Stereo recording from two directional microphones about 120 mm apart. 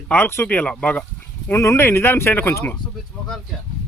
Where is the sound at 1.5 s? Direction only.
20° left (ahead or behind).